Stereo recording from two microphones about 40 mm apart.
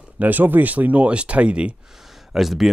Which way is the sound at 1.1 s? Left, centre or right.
Right.